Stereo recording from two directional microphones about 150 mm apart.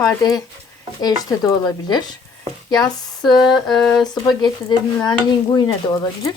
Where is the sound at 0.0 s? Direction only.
25° left (ahead or behind).